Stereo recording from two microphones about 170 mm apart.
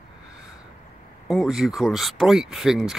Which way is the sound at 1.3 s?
Centre (ahead or behind).